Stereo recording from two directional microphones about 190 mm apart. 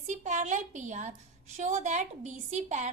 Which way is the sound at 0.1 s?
40° right (ahead or behind).